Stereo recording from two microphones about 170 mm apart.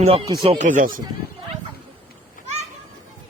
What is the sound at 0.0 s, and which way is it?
Speech, 35° right (ahead or behind).